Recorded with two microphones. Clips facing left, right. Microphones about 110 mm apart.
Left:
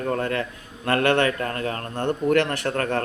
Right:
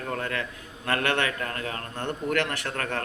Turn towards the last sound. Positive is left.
turn(degrees=35)  # may be behind; listen again after turning